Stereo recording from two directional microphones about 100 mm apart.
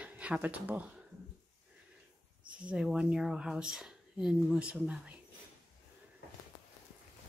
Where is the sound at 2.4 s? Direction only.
10° right (ahead or behind).